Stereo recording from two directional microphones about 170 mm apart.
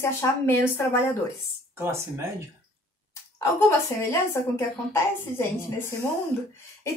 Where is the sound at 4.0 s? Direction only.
15° left (ahead or behind).